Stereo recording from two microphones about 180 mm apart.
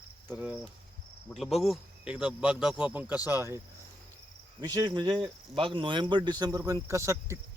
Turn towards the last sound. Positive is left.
turn(degrees=-15)  # may be behind; listen again after turning